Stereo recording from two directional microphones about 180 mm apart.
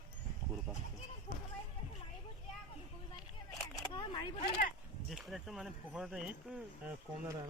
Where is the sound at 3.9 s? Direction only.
20° left (ahead or behind).